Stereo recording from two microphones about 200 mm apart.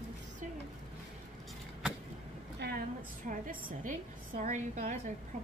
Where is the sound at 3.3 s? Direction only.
45° right (ahead or behind).